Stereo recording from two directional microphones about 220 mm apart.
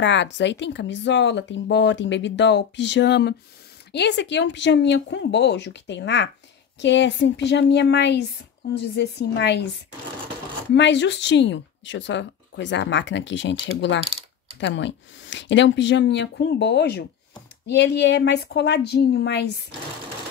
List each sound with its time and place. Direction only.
0.0 s speech: 55° left (ahead or behind)
10.7 s speech: 55° left (ahead or behind)